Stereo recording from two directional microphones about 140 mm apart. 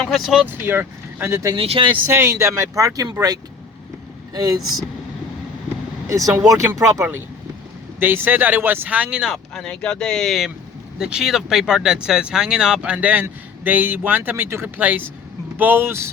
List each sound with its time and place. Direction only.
0.0 s speech: centre (ahead or behind)
0.4 s speech: 15° right (ahead or behind)
1.5 s speech: 40° right (ahead or behind)
2.0 s speech: 20° right (ahead or behind)
4.4 s speech: 25° right (ahead or behind)
6.1 s speech: 25° right (ahead or behind)